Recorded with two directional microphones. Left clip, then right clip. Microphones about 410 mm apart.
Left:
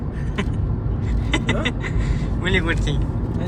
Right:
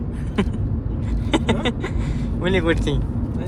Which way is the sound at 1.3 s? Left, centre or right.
Centre.